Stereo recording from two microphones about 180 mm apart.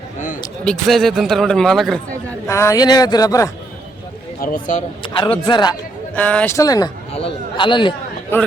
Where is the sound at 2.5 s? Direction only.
15° left (ahead or behind).